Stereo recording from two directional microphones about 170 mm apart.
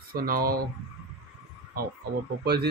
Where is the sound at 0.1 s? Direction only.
60° right (ahead or behind).